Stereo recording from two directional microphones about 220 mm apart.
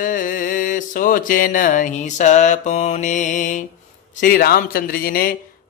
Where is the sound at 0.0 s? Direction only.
35° left (ahead or behind).